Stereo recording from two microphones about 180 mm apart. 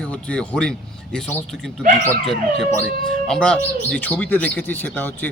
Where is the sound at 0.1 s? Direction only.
5° left (ahead or behind).